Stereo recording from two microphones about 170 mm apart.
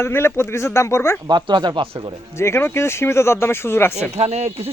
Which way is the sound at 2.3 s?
15° left (ahead or behind).